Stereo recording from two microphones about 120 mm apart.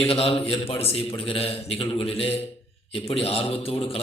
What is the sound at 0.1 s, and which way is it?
A man's voice, 55° left (ahead or behind).